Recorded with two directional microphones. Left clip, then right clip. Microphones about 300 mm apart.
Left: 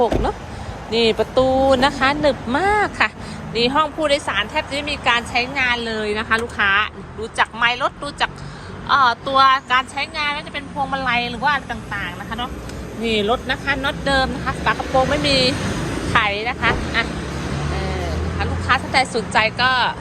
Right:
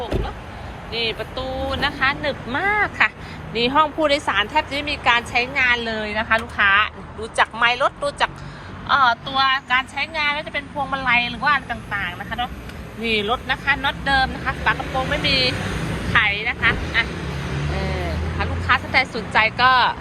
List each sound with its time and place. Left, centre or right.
0.9 s speech: centre
18.3 s speech: centre